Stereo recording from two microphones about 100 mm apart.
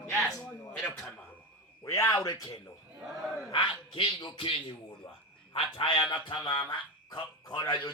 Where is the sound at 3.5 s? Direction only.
60° left (ahead or behind).